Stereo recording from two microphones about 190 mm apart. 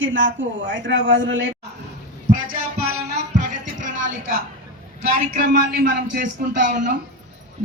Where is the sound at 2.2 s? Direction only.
45° right (ahead or behind).